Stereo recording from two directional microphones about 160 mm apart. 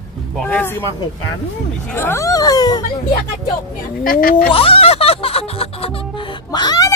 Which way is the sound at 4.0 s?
60° left (ahead or behind).